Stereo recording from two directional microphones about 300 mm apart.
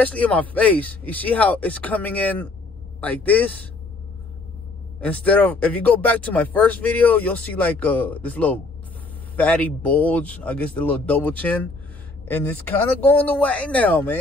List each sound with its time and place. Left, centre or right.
0.0 s speech: centre
5.0 s speech: centre
13.0 s speech: centre